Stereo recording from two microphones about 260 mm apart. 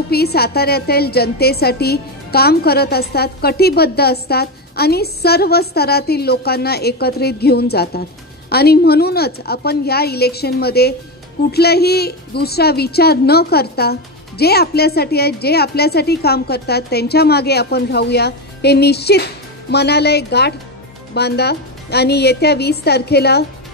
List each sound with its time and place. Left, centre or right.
0.1 s a woman's voice: left